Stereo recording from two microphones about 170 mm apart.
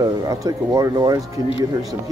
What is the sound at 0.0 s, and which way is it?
Speech, 20° right (ahead or behind).